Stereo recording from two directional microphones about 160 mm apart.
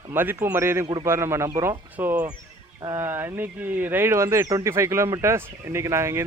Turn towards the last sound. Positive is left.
turn(degrees=-15)  # may be behind; listen again after turning